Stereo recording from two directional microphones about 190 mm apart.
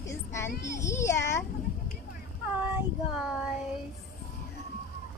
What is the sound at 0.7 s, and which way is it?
Speech, 15° left (ahead or behind).